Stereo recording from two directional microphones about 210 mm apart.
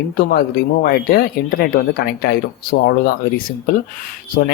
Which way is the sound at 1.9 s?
50° left (ahead or behind).